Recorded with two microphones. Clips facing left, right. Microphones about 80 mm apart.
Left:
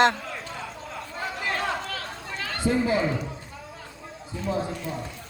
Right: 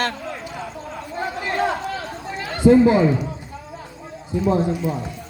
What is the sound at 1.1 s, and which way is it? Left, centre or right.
Chatter, right.